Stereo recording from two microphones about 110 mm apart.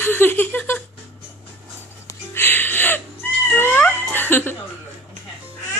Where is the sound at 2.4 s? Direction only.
20° left (ahead or behind).